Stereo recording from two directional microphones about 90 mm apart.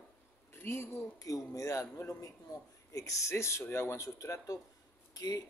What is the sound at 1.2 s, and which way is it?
Speech, 40° left (ahead or behind).